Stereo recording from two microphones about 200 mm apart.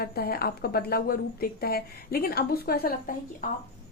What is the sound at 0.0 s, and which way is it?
A woman's voice, 50° left (ahead or behind).